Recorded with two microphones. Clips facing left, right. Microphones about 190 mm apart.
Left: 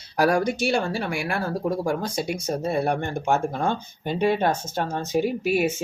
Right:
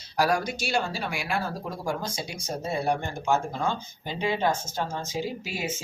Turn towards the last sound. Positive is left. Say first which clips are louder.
# left 10 dB
turn(degrees=60)  # may be behind; listen again after turning